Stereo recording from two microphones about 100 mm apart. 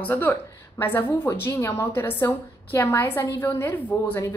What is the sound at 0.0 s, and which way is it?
A woman's voice, 20° left (ahead or behind).